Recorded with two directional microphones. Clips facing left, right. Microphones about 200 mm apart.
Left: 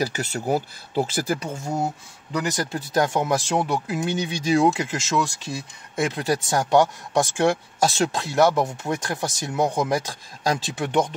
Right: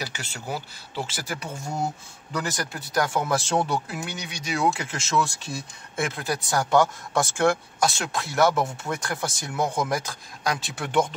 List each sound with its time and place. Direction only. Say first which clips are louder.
0.0 s speech: left 9 dB; 40° left (ahead or behind)
1.3 s speech: left 6 dB; 30° left (ahead or behind); by 3.8 s 10° left (ahead or behind)
4.0 s speech: left 10 dB; 30° left (ahead or behind)